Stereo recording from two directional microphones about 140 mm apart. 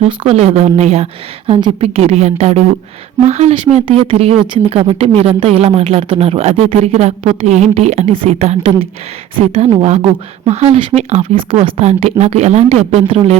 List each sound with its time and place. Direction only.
0.0 s speech: 40° right (ahead or behind)